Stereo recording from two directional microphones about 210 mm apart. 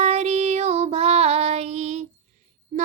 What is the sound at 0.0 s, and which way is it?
Female singing, 30° right (ahead or behind).